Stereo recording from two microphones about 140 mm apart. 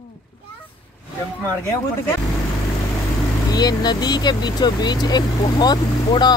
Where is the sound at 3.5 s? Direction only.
30° left (ahead or behind).